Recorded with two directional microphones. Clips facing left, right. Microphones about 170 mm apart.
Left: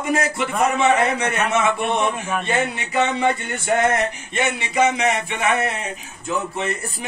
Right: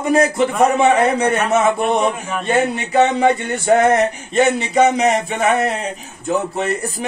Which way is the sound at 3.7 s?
30° right (ahead or behind).